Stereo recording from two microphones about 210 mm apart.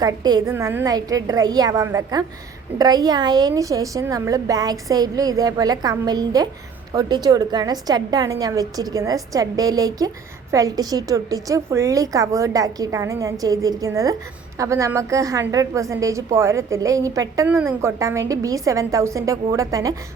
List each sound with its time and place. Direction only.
0.0 s a woman's voice: 20° right (ahead or behind)